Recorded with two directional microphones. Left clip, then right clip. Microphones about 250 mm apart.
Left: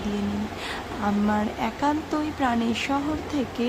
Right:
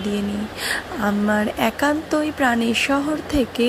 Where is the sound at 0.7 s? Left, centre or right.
Centre.